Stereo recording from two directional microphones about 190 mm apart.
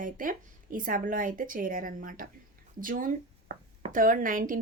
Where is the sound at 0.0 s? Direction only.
45° right (ahead or behind).